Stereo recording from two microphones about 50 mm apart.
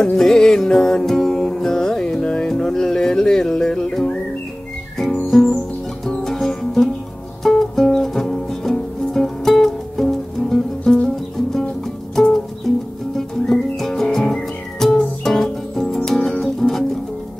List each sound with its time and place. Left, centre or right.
0.0 s music: centre
6.0 s music: centre
10.8 s music: centre
12.7 s music: centre